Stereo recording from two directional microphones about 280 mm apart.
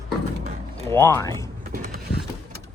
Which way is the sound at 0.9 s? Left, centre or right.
Centre.